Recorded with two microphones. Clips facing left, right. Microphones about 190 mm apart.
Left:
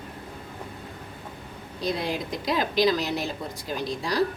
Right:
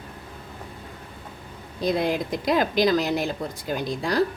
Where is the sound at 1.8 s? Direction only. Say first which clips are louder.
Right 5 dB; 50° right (ahead or behind).